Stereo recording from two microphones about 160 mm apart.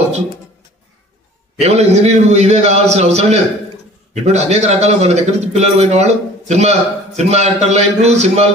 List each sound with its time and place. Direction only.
1.6 s a man's voice: 40° right (ahead or behind)